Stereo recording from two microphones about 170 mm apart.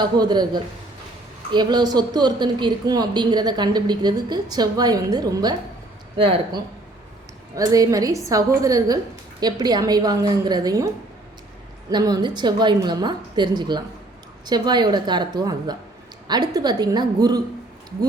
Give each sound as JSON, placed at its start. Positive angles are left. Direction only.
{"t": 0.0, "sound": "speech", "side_deg": -25}